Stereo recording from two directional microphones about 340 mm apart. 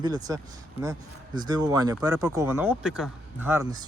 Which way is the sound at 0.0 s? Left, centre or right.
Centre.